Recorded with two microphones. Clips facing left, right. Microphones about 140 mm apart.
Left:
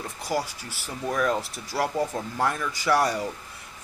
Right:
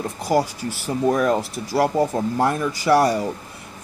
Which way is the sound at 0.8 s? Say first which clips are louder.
Right 7 dB; 40° right (ahead or behind).